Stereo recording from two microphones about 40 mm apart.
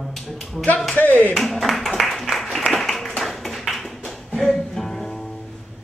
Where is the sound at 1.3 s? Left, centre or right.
Centre.